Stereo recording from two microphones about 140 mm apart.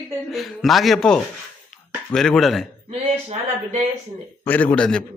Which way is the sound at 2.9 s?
55° right (ahead or behind).